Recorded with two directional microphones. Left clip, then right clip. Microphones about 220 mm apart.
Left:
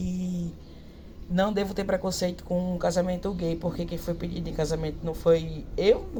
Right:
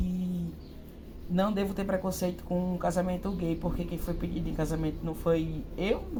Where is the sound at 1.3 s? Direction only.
45° left (ahead or behind).